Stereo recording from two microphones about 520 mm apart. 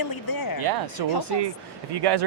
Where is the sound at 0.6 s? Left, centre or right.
Right.